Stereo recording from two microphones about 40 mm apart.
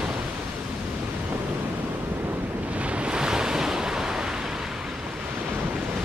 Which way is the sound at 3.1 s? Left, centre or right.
Centre.